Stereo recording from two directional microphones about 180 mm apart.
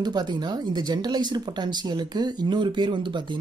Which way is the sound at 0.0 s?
25° right (ahead or behind).